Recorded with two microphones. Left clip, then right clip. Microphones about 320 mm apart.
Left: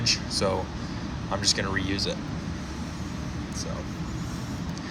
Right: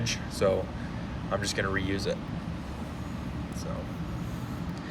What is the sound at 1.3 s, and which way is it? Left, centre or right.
Speech, centre.